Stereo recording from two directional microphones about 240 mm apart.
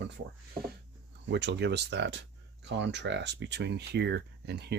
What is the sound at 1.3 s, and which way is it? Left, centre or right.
Speech, right.